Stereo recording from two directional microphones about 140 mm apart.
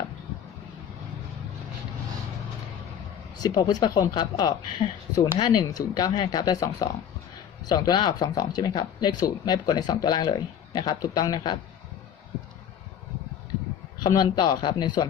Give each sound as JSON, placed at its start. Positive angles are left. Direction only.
{"t": 3.3, "sound": "speech", "side_deg": 30}
{"t": 14.0, "sound": "speech", "side_deg": 30}